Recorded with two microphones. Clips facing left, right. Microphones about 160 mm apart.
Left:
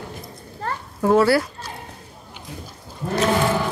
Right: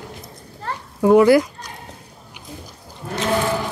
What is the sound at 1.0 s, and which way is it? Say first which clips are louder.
Speech: right 4 dB; 15° right (ahead or behind).